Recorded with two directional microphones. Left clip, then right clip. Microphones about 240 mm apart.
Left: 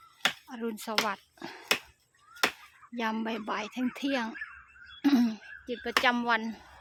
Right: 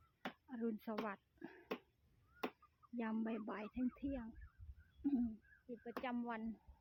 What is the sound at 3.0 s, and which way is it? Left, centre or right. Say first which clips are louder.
Speech: left 13 dB; centre.